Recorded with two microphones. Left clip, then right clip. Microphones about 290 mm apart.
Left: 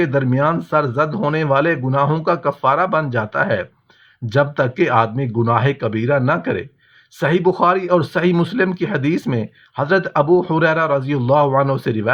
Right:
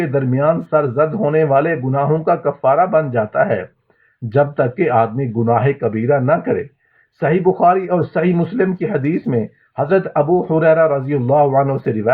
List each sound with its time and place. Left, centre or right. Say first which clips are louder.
0.0 s a man's voice: right 1 dB; left